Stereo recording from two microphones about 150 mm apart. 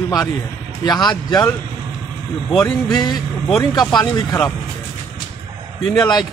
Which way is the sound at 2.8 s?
30° left (ahead or behind).